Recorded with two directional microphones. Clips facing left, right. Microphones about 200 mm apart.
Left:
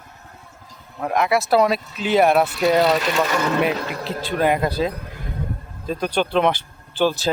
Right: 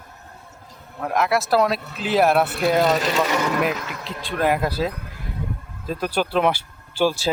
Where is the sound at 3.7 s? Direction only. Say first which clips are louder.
Left 5 dB; 35° left (ahead or behind).